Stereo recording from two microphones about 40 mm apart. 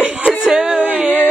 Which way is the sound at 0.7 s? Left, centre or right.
Right.